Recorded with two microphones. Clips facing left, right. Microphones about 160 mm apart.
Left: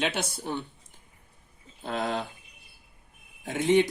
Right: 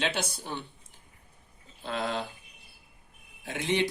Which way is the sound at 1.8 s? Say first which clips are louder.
Left 2 dB; 50° left (ahead or behind).